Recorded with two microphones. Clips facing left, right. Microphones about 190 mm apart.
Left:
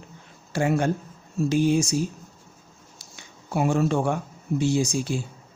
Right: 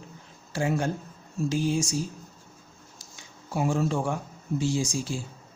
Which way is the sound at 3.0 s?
65° left (ahead or behind).